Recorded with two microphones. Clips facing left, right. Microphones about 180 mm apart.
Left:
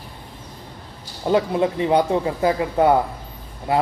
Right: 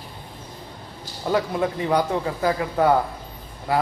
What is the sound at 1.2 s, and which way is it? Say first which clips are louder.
Speech: left 4 dB; 20° left (ahead or behind).